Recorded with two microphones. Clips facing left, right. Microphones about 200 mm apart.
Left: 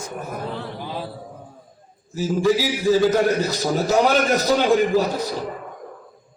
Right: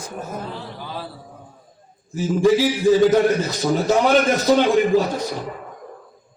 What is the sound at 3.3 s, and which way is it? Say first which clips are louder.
A man's voice: right 1 dB; 40° left (ahead or behind).